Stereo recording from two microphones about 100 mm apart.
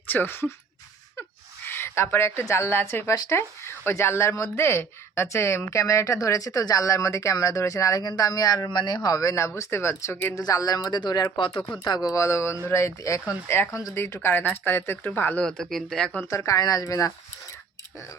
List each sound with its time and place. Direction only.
0.1 s speech: 20° left (ahead or behind)
1.6 s speech: 25° left (ahead or behind)
10.3 s speech: 35° left (ahead or behind)
12.1 s speech: 30° left (ahead or behind)
15.4 s speech: 5° left (ahead or behind)
16.3 s speech: 30° left (ahead or behind)